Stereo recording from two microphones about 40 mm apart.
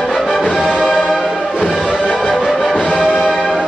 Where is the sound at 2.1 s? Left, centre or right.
Centre.